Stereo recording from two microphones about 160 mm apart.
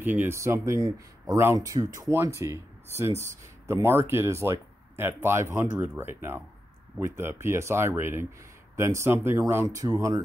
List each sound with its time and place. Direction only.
0.0 s speech: 10° right (ahead or behind)